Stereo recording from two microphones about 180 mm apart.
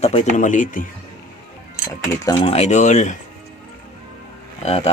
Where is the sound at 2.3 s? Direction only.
35° left (ahead or behind).